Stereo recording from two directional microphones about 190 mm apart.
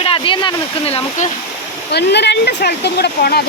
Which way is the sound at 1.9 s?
65° left (ahead or behind).